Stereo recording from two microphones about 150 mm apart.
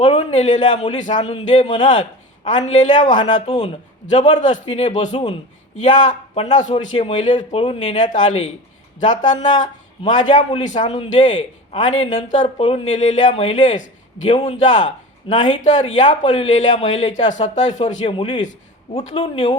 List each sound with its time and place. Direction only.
0.0 s speech: 50° left (ahead or behind)
3.3 s speech: 45° left (ahead or behind)
10.8 s a man's voice: 35° left (ahead or behind)
11.1 s speech: 55° left (ahead or behind)
18.1 s a man's voice: 35° left (ahead or behind)
18.9 s speech: 45° left (ahead or behind)